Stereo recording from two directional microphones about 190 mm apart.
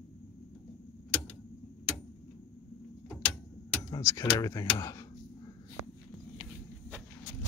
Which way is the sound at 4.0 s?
15° left (ahead or behind).